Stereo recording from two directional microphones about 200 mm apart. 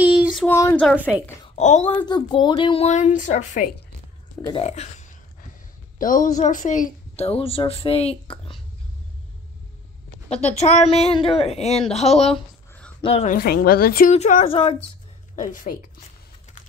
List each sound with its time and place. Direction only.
0.0 s a sound: 5° right (ahead or behind)
0.5 s a woman's voice: 10° left (ahead or behind)
0.9 s a woman's voice: 5° right (ahead or behind)
1.4 s a woman's voice: 35° left (ahead or behind)
2.0 s a woman's voice: 20° left (ahead or behind); by 3.6 s 35° left (ahead or behind)
4.4 s a woman's voice: 20° left (ahead or behind)
4.6 s a woman's voice: 35° left (ahead or behind)
10.3 s a woman's voice: 35° left (ahead or behind)
13.4 s a woman's voice: 50° left (ahead or behind)
14.1 s a woman's voice: 35° left (ahead or behind)
15.3 s a woman's voice: 40° left (ahead or behind)